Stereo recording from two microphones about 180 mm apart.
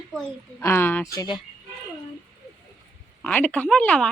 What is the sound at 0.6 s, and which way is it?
Speech, 10° left (ahead or behind).